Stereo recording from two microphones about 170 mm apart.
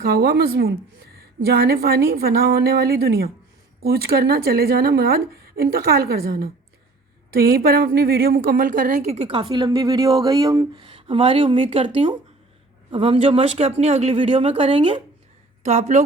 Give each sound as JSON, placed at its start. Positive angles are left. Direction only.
{"t": 0.0, "sound": "a woman's voice", "side_deg": -65}
{"t": 15.6, "sound": "a woman's voice", "side_deg": -45}